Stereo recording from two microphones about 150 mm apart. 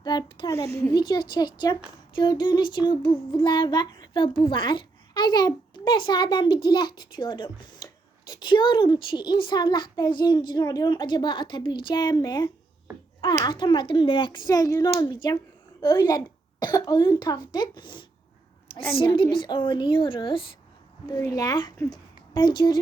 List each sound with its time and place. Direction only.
0.0 s speech: 30° left (ahead or behind)
2.1 s child singing: 30° left (ahead or behind)
13.3 s speech: 30° left (ahead or behind)
18.9 s child singing: 35° left (ahead or behind)
21.1 s a woman's voice: 20° left (ahead or behind)